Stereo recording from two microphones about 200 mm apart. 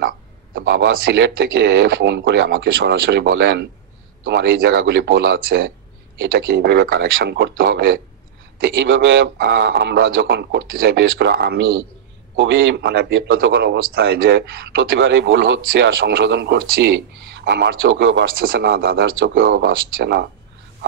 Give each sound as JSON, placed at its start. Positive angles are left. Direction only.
{"t": 0.0, "sound": "a man's voice", "side_deg": -45}
{"t": 8.8, "sound": "a man's voice", "side_deg": -65}
{"t": 18.2, "sound": "speech", "side_deg": -45}